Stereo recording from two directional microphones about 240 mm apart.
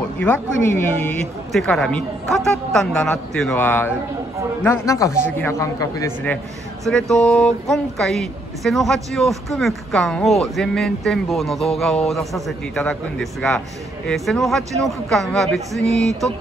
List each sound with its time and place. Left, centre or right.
0.2 s a man's voice: centre
6.8 s speech: centre